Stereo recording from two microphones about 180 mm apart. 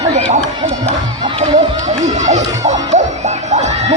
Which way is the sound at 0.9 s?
35° right (ahead or behind).